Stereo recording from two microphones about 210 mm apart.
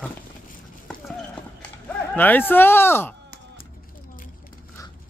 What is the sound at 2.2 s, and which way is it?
Speech, 10° left (ahead or behind).